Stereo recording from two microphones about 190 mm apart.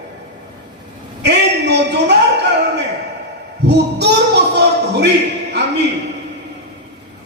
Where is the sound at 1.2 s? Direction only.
65° right (ahead or behind).